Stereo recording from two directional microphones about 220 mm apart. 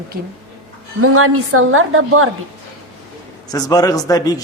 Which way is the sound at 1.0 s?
85° right.